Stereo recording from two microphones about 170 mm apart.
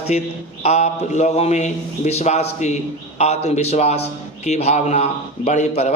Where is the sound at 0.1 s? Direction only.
45° left (ahead or behind).